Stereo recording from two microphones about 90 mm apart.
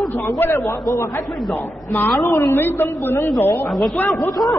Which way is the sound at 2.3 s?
35° left (ahead or behind).